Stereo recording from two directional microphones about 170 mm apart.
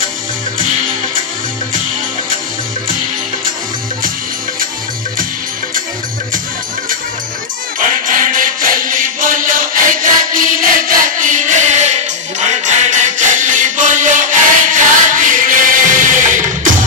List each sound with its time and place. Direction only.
7.8 s music: 50° right (ahead or behind)